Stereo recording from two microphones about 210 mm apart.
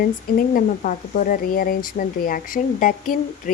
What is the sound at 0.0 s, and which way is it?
Speech, 45° left (ahead or behind).